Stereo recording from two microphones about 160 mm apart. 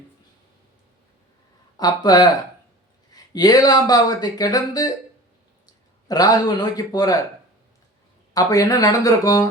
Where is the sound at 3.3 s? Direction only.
25° left (ahead or behind).